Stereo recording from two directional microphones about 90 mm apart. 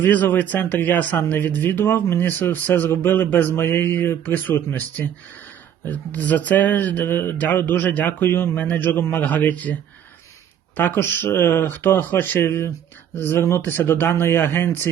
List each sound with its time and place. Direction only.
0.0 s speech: 20° left (ahead or behind)
10.8 s speech: 25° left (ahead or behind)